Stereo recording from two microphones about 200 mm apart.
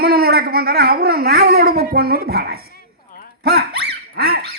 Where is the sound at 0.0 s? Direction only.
50° right (ahead or behind).